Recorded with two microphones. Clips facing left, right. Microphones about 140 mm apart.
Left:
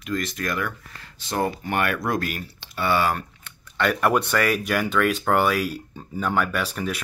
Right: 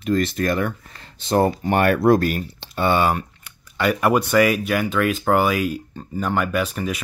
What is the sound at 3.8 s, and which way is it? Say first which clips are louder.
Speech: right 2 dB; 5° right (ahead or behind).